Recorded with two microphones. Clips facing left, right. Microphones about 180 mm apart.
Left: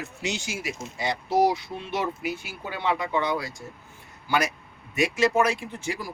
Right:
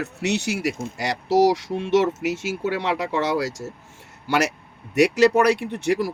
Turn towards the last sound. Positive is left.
turn(degrees=-70)  # may be behind; listen again after turning